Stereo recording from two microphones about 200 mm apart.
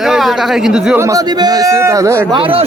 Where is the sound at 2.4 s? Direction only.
25° right (ahead or behind).